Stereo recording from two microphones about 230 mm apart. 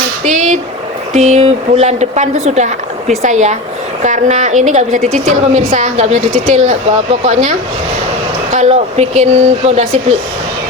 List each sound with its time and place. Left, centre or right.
0.3 s a woman's voice: right
8.5 s a woman's voice: right